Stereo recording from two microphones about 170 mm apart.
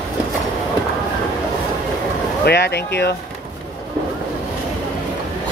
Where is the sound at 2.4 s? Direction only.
75° left (ahead or behind).